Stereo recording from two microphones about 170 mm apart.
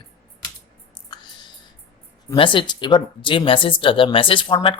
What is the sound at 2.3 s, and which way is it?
Speech, 30° left (ahead or behind).